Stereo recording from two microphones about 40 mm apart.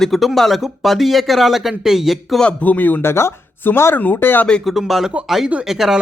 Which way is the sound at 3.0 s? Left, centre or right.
Left.